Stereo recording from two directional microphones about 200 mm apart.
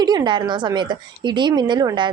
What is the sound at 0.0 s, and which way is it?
A woman's voice, 20° right (ahead or behind).